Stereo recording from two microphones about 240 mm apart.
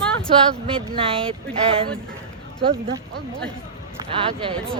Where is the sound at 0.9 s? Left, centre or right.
Right.